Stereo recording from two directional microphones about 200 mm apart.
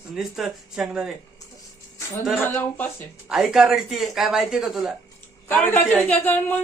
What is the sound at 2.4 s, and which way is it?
Speech, 10° left (ahead or behind).